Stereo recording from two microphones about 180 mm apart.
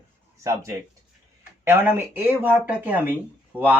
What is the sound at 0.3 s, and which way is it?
Speech, 15° right (ahead or behind).